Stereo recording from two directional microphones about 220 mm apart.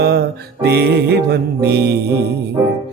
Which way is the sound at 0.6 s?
45° right (ahead or behind).